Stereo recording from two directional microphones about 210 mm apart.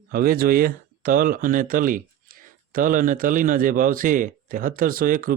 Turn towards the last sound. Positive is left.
turn(degrees=-45)  # may be behind; listen again after turning